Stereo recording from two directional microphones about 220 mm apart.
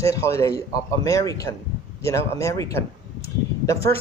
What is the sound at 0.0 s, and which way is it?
A man's voice, 15° left (ahead or behind).